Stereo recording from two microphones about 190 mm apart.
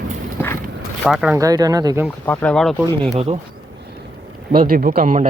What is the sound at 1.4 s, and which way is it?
Speech, 20° right (ahead or behind).